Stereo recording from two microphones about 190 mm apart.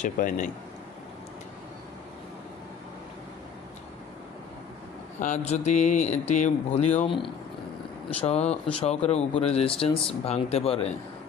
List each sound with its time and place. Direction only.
0.0 s speech: 40° left (ahead or behind)
5.2 s speech: 35° left (ahead or behind)